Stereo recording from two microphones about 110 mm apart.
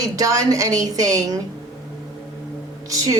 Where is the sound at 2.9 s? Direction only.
35° right (ahead or behind).